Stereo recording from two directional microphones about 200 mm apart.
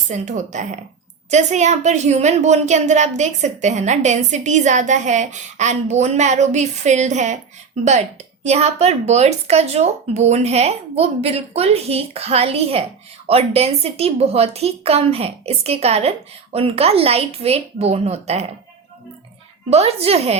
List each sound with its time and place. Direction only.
0.1 s a woman's voice: 35° right (ahead or behind)
19.7 s a woman's voice: 30° right (ahead or behind)